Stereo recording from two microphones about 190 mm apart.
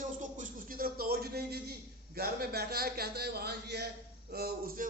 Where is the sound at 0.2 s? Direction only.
45° right (ahead or behind).